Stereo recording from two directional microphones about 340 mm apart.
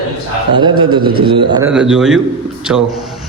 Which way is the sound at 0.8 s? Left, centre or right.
Right.